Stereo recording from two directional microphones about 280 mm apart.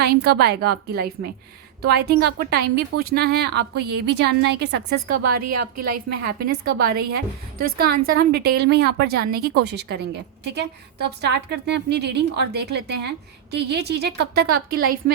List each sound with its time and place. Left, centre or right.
0.0 s a woman's voice: right
5.2 s a woman's voice: right
6.2 s a woman's voice: right